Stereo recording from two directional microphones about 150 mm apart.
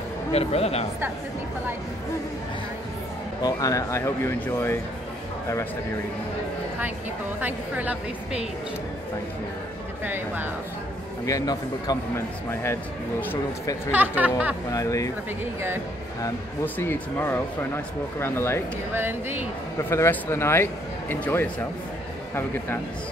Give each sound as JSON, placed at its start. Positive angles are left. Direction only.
{"t": 0.3, "sound": "speech", "side_deg": 45}
{"t": 3.4, "sound": "speech", "side_deg": 25}
{"t": 7.3, "sound": "a woman's voice", "side_deg": -10}
{"t": 10.0, "sound": "a woman's voice", "side_deg": -15}
{"t": 11.2, "sound": "speech", "side_deg": 25}
{"t": 13.3, "sound": "speech", "side_deg": 15}
{"t": 13.9, "sound": "a woman's voice", "side_deg": -10}
{"t": 14.7, "sound": "speech", "side_deg": 20}
{"t": 16.6, "sound": "speech", "side_deg": 15}
{"t": 18.9, "sound": "a woman's voice", "side_deg": -15}
{"t": 19.8, "sound": "speech", "side_deg": 15}